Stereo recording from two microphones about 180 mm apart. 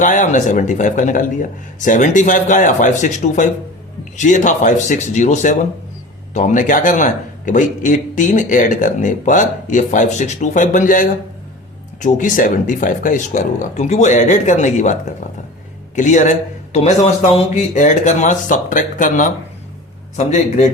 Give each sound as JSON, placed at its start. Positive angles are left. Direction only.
{"t": 0.0, "sound": "a man's voice", "side_deg": 45}
{"t": 16.0, "sound": "a man's voice", "side_deg": 45}